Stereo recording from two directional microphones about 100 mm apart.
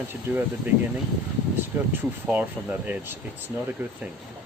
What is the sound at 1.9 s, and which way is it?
Speech, 20° right (ahead or behind).